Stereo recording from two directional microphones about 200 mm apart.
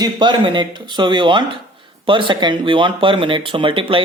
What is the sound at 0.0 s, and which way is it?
Speech, 20° right (ahead or behind).